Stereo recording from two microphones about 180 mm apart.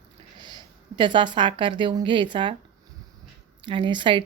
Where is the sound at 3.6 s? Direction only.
25° right (ahead or behind).